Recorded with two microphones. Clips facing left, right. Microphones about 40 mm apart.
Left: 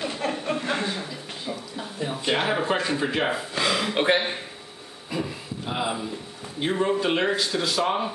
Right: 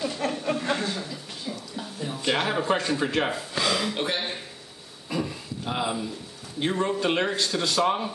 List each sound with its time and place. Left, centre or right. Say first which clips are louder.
0.2 s chuckle: left 1 dB; centre
2.2 s speech: even; centre
3.9 s a man's voice: left 7 dB; left
5.1 s a sound: even; centre
6.6 s speech: left 2 dB; centre